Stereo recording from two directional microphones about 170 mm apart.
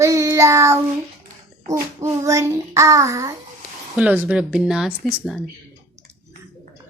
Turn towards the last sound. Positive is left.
turn(degrees=0)  # may be behind; listen again after turning